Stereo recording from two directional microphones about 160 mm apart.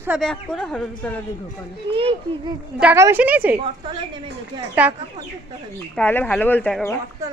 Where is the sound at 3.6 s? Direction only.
30° right (ahead or behind).